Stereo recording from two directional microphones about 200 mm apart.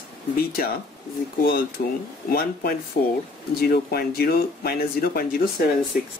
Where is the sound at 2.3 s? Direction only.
50° left (ahead or behind).